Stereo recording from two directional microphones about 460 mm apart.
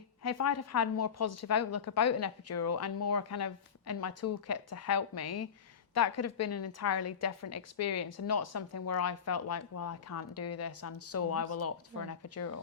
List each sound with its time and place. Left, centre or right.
0.2 s a woman's voice: left